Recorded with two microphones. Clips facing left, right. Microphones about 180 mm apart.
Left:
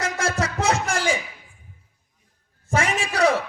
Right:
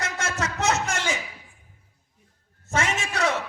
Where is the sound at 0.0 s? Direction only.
35° left (ahead or behind).